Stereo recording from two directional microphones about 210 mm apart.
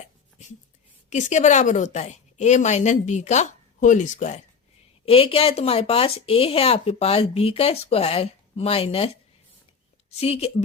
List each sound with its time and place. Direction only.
1.1 s a woman's voice: 35° left (ahead or behind)
10.2 s speech: 30° left (ahead or behind)